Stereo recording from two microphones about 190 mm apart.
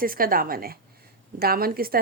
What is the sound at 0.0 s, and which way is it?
A woman's voice, 50° right (ahead or behind).